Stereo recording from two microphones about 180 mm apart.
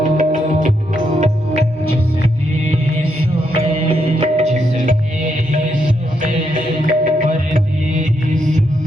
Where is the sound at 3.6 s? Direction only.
30° right (ahead or behind).